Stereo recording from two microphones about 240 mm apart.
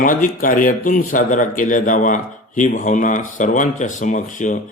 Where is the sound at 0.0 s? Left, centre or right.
Left.